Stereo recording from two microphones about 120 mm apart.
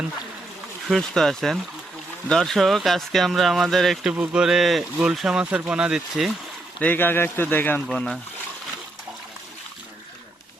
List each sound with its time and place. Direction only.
0.9 s speech: centre (ahead or behind)
4.1 s speech: 10° right (ahead or behind)
6.7 s speech: 15° left (ahead or behind)
7.9 s speech: 5° left (ahead or behind)